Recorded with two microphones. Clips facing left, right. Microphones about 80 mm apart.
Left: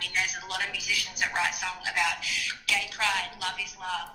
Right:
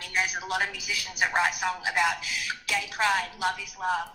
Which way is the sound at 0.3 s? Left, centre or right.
Right.